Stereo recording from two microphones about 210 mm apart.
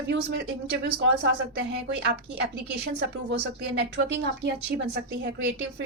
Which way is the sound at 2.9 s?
55° right (ahead or behind).